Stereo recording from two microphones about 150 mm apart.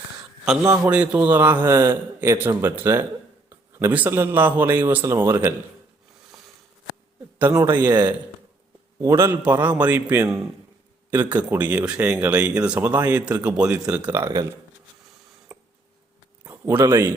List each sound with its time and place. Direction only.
0.6 s a man's voice: 20° right (ahead or behind)
0.9 s speech: 5° right (ahead or behind)
7.5 s speech: 20° right (ahead or behind)
9.0 s speech: 20° right (ahead or behind)
15.5 s a sound: 10° right (ahead or behind)
16.4 s speech: 15° right (ahead or behind)